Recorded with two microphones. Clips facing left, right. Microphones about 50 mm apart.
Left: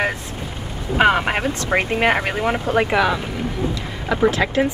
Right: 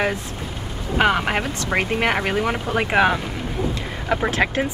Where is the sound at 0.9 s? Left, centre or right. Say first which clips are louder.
Left 2 dB; centre.